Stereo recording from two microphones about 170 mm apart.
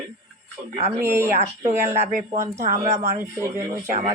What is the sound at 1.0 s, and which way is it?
Speech, 15° right (ahead or behind).